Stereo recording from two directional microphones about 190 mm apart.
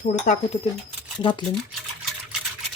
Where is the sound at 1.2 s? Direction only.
25° left (ahead or behind).